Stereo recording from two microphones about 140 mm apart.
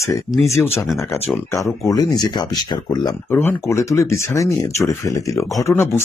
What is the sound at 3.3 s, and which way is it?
Speech, 15° left (ahead or behind).